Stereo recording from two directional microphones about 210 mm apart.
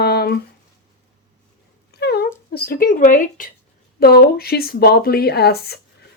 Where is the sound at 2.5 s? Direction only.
45° left (ahead or behind).